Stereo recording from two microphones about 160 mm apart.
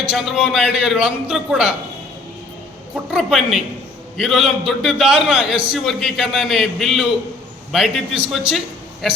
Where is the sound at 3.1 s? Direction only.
5° right (ahead or behind).